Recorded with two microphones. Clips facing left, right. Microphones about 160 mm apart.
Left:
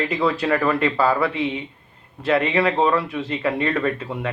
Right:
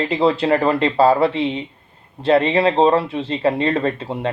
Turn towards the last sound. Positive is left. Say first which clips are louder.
# right 2 dB
turn(degrees=-30)  # may be behind; listen again after turning